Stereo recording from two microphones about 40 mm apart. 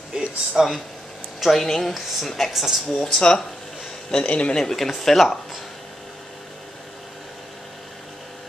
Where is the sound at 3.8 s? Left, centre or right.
Centre.